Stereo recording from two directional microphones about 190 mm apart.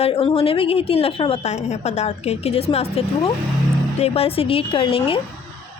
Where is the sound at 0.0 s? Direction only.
30° left (ahead or behind).